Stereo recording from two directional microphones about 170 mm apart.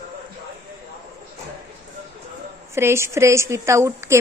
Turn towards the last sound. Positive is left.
turn(degrees=-15)  # may be behind; listen again after turning